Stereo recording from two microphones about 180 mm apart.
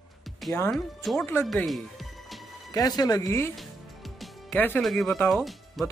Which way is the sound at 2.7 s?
20° left (ahead or behind).